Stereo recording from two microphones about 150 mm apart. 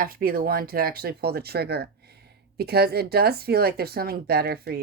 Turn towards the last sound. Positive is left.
turn(degrees=-90)